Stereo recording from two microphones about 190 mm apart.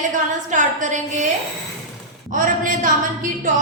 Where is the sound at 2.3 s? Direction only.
45° right (ahead or behind).